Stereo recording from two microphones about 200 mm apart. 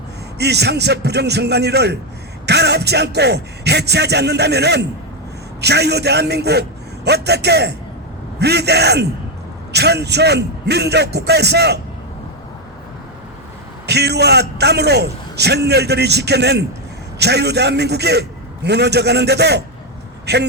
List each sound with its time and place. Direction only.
0.3 s a man's voice: 55° right (ahead or behind)
13.8 s a man's voice: 55° right (ahead or behind)